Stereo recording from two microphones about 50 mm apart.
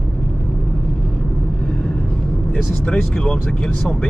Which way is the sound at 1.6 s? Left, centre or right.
Centre.